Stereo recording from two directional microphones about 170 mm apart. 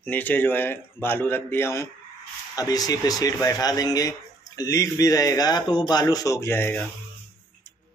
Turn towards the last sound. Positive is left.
turn(degrees=15)  # may be behind; listen again after turning